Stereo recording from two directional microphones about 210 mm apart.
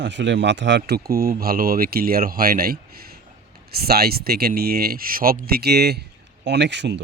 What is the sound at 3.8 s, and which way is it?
Speech, 50° right (ahead or behind).